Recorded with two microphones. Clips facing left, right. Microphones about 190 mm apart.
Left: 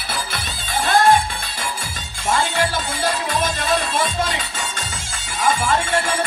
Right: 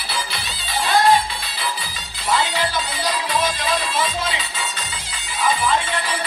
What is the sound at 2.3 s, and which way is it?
Music, 50° left (ahead or behind).